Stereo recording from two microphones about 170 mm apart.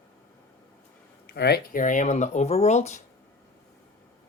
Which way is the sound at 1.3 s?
70° left (ahead or behind).